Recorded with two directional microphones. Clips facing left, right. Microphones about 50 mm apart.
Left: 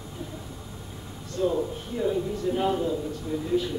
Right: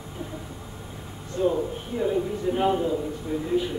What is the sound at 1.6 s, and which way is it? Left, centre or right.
A man's voice, centre.